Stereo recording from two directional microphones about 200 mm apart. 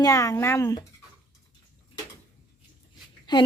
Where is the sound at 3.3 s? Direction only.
20° left (ahead or behind).